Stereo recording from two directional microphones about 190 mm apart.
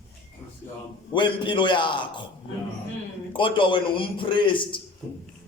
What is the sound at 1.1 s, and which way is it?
Speech, 25° left (ahead or behind).